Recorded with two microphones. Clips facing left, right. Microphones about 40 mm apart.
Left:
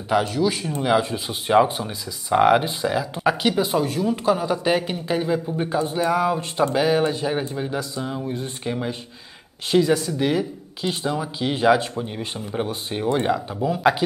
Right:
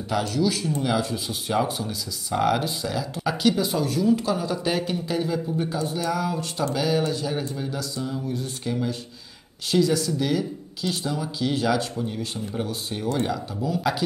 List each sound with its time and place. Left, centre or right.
0.1 s speech: left